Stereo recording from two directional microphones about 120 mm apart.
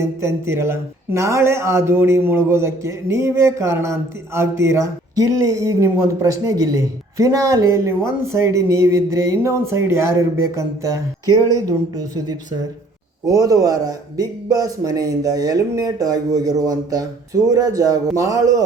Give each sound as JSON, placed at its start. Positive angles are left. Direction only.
{"t": 0.0, "sound": "speech", "side_deg": -20}
{"t": 13.2, "sound": "speech", "side_deg": -30}